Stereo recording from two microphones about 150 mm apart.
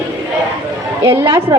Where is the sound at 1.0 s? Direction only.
20° right (ahead or behind).